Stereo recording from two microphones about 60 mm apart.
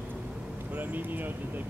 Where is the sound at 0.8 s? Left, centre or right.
Right.